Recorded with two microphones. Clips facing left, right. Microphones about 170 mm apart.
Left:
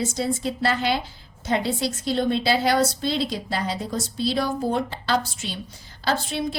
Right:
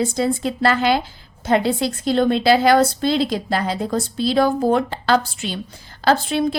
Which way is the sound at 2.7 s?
60° right (ahead or behind).